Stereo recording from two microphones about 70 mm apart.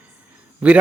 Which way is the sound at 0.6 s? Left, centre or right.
Centre.